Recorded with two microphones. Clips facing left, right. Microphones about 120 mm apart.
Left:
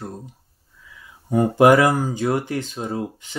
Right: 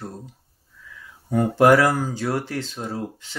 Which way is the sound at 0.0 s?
15° left (ahead or behind).